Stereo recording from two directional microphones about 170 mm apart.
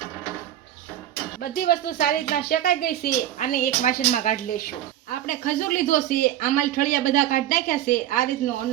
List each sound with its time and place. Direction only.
1.4 s a woman's voice: 65° left (ahead or behind)